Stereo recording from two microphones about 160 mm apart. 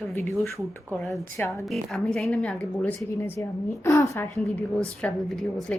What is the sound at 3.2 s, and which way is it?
A woman's voice, 15° left (ahead or behind).